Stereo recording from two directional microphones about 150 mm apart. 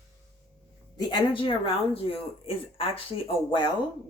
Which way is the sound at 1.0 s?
30° left (ahead or behind).